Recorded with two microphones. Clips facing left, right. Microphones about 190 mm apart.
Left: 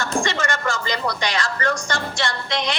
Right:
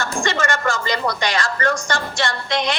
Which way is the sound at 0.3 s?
50° right (ahead or behind).